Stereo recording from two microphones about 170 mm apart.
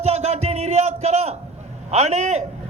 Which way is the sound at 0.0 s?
40° right (ahead or behind).